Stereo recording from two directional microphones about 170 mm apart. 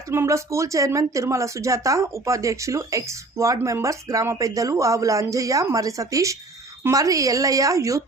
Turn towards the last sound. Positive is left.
turn(degrees=-20)  # may be behind; listen again after turning